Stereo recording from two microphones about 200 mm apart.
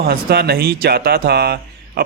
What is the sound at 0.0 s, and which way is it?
Speech, 50° right (ahead or behind).